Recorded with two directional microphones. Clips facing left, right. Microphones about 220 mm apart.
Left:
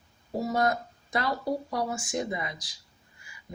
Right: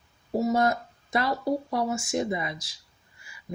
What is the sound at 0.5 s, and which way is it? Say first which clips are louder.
Speech: right 3 dB; 25° right (ahead or behind).